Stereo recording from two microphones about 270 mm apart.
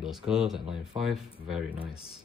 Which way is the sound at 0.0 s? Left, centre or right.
Centre.